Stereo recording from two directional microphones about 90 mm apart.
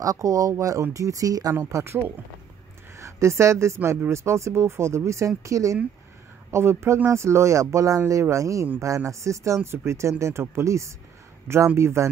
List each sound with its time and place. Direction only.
0.0 s speech: 40° right (ahead or behind)
1.5 s speech: 30° right (ahead or behind)